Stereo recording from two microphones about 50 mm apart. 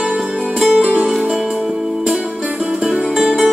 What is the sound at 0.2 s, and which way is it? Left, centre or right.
Music, centre.